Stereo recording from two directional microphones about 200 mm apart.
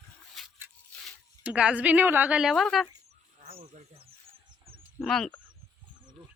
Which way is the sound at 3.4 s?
30° right (ahead or behind).